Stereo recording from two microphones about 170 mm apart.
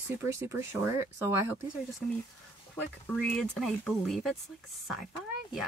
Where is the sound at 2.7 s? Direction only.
5° left (ahead or behind).